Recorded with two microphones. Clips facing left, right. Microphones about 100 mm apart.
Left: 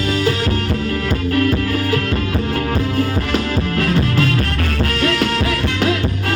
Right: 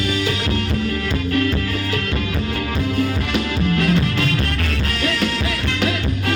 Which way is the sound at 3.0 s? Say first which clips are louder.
Left 2 dB; 40° left (ahead or behind).